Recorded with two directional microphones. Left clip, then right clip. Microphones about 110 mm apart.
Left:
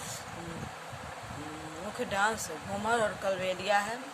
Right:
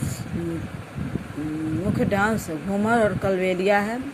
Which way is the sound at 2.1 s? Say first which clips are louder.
Right 4 dB; 45° right (ahead or behind).